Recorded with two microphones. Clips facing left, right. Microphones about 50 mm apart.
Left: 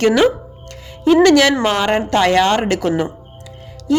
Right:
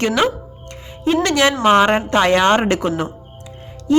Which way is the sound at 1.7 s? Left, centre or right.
Centre.